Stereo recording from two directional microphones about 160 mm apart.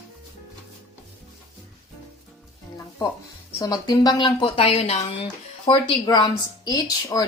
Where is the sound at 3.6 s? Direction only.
25° left (ahead or behind); by 5.0 s 40° left (ahead or behind).